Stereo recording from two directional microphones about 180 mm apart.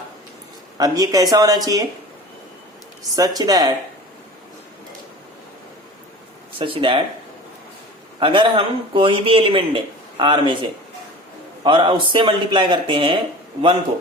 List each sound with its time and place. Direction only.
0.8 s speech: 20° right (ahead or behind)
3.2 s speech: 20° right (ahead or behind)
6.6 s speech: 30° right (ahead or behind)
8.2 s speech: 25° right (ahead or behind)